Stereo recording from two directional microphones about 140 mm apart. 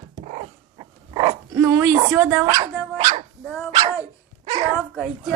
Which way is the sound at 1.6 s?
20° right (ahead or behind).